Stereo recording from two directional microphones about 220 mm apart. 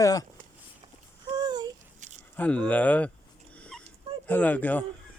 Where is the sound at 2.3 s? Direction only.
5° left (ahead or behind).